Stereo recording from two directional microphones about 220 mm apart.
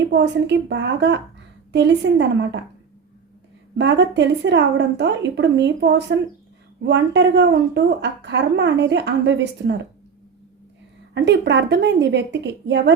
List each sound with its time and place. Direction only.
0.1 s a woman's voice: 50° right (ahead or behind)
3.8 s a woman's voice: 50° right (ahead or behind)
11.1 s a woman's voice: 50° right (ahead or behind)